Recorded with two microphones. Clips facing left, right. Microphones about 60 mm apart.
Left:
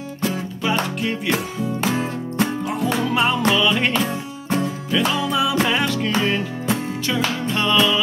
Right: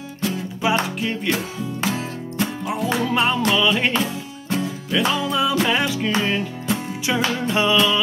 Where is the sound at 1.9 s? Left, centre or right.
Left.